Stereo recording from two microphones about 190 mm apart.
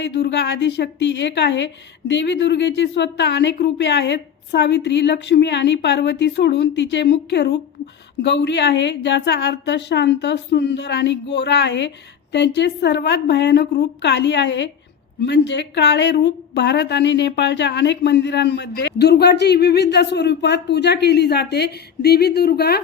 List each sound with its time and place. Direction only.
0.0 s a woman's voice: 60° left (ahead or behind)